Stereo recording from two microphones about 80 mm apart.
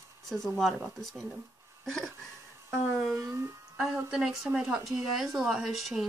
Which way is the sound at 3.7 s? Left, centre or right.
Centre.